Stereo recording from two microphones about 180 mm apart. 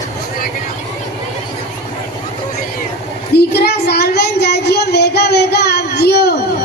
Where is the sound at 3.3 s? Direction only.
65° left (ahead or behind).